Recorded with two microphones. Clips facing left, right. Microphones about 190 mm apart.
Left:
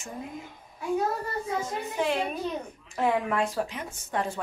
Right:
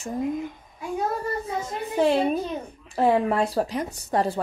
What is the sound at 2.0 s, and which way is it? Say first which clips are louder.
A woman's voice: right 8 dB; 35° right (ahead or behind).